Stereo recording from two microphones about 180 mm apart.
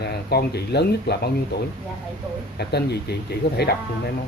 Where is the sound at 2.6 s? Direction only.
65° left (ahead or behind).